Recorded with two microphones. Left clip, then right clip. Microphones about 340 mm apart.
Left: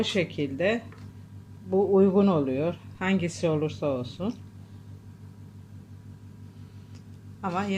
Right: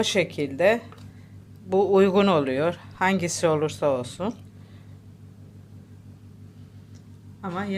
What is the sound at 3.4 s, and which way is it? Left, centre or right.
Speech, right.